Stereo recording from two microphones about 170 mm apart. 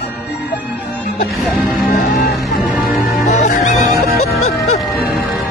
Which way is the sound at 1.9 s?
55° left (ahead or behind).